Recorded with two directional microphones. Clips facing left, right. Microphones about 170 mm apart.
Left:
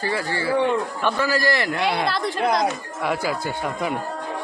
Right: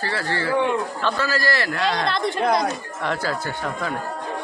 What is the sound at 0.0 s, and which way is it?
A man's voice, 15° left (ahead or behind).